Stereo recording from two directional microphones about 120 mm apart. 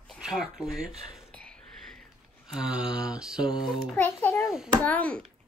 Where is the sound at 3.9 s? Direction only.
15° left (ahead or behind).